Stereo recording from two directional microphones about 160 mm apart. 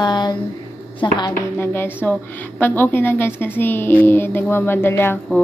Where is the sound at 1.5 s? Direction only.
15° left (ahead or behind).